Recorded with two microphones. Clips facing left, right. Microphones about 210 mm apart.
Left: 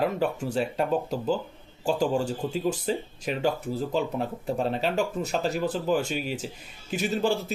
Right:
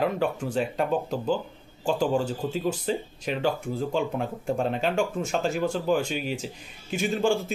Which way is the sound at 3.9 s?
Centre (ahead or behind).